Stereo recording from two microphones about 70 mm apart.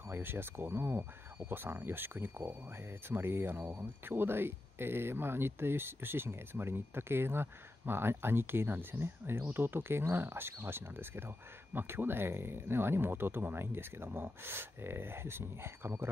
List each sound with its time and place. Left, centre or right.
0.1 s speech: right